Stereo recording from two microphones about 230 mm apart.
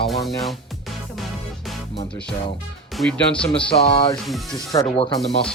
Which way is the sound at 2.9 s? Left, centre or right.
Centre.